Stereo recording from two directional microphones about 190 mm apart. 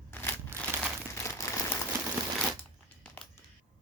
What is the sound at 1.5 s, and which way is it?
Crumpling, 15° left (ahead or behind).